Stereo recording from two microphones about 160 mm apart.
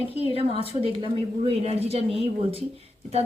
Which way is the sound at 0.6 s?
35° right (ahead or behind).